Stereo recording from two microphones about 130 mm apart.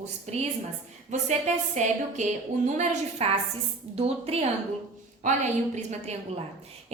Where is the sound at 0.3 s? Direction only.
60° right (ahead or behind).